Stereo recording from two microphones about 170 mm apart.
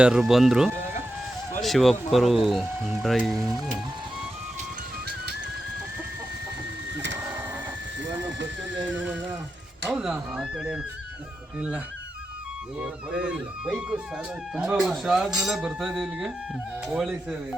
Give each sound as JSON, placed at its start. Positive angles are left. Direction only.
{"t": 0.0, "sound": "speech", "side_deg": -5}
{"t": 3.3, "sound": "speech", "side_deg": -20}
{"t": 7.2, "sound": "printer", "side_deg": -10}
{"t": 9.9, "sound": "speech", "side_deg": -5}
{"t": 12.8, "sound": "speech", "side_deg": -5}